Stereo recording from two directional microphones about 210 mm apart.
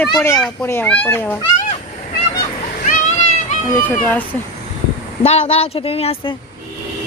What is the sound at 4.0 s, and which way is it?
Speech, 5° left (ahead or behind).